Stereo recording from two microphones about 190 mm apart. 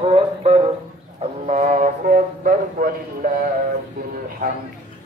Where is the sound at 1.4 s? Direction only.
40° right (ahead or behind).